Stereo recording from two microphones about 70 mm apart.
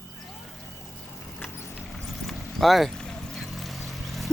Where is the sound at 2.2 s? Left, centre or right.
Centre.